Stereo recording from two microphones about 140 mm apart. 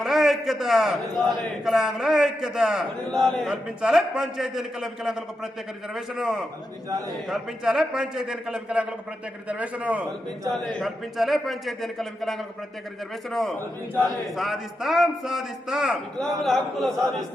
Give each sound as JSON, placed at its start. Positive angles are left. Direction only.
{"t": 0.0, "sound": "a man's voice", "side_deg": 0}